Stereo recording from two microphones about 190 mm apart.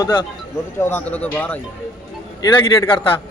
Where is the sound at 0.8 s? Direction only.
10° left (ahead or behind).